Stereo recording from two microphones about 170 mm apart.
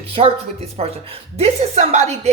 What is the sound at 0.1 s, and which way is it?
A woman's voice, 35° right (ahead or behind).